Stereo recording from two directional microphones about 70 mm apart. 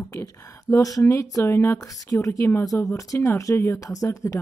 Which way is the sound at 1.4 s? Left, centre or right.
Left.